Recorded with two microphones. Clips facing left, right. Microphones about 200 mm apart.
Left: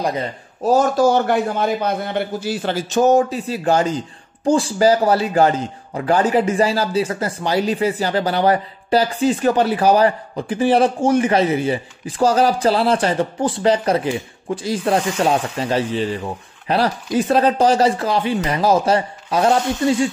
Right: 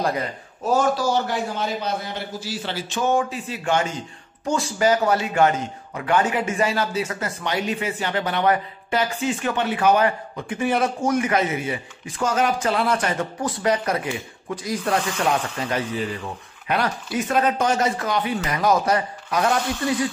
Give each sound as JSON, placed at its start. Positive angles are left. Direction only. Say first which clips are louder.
{"t": 0.7, "sound": "a man's voice", "louder": "left 6 dB", "side_deg": 45}